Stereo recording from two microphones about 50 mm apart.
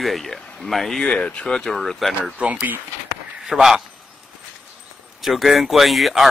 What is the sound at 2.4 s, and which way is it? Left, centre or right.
Speech, right.